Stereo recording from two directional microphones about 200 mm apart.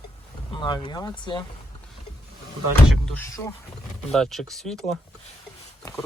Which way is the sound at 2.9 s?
5° left (ahead or behind).